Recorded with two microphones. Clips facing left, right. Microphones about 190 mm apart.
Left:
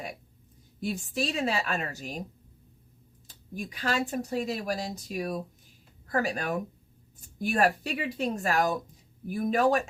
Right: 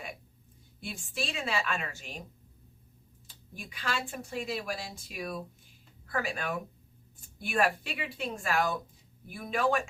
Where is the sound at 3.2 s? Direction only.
40° left (ahead or behind).